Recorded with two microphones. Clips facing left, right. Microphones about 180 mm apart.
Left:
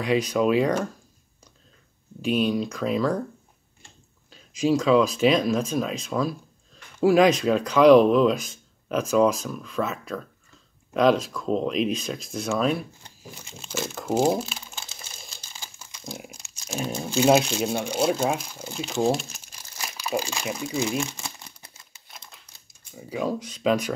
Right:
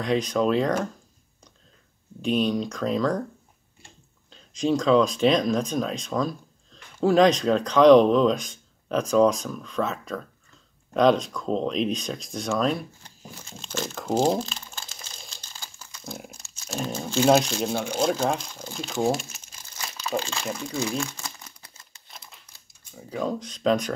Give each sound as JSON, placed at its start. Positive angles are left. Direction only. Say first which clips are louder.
{"t": 0.0, "sound": "speech", "louder": "left 1 dB", "side_deg": 5}
{"t": 2.2, "sound": "speech", "louder": "even", "side_deg": 5}
{"t": 4.3, "sound": "speech", "louder": "left 2 dB", "side_deg": 5}
{"t": 13.4, "sound": "crumpling", "louder": "even", "side_deg": 10}
{"t": 16.0, "sound": "crumpling", "louder": "even", "side_deg": -5}
{"t": 16.3, "sound": "crunch", "louder": "even", "side_deg": 15}
{"t": 16.7, "sound": "speech", "louder": "even", "side_deg": 10}
{"t": 19.8, "sound": "speech", "louder": "left 1 dB", "side_deg": 15}
{"t": 21.0, "sound": "crumpling", "louder": "left 1 dB", "side_deg": 20}
{"t": 22.0, "sound": "typewriter", "louder": "even", "side_deg": 0}
{"t": 22.9, "sound": "speech", "louder": "left 1 dB", "side_deg": 10}